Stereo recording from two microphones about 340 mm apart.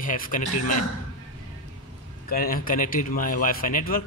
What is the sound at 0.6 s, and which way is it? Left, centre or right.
Speech, left.